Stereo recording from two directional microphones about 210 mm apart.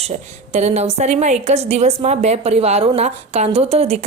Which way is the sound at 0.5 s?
30° right (ahead or behind).